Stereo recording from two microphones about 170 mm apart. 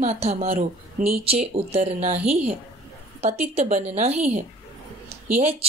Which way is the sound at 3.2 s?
40° right (ahead or behind).